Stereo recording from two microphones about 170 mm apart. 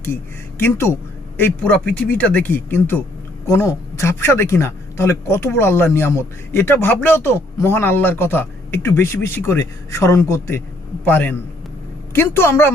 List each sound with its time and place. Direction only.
0.6 s speech: 15° left (ahead or behind)